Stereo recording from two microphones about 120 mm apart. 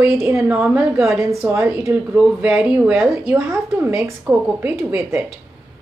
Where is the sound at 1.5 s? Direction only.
20° right (ahead or behind).